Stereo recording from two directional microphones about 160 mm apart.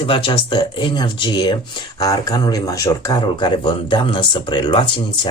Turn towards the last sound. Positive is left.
turn(degrees=30)  # may be behind; listen again after turning